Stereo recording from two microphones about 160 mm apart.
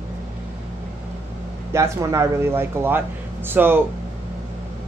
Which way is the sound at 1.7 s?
20° right (ahead or behind).